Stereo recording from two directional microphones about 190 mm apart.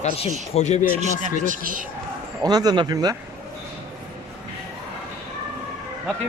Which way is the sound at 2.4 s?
20° right (ahead or behind).